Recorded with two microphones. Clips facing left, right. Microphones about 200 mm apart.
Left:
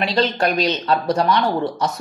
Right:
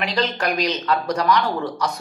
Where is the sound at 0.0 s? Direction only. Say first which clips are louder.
Left 4 dB; 25° left (ahead or behind).